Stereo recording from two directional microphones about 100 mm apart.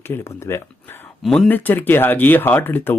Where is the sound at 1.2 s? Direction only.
5° left (ahead or behind).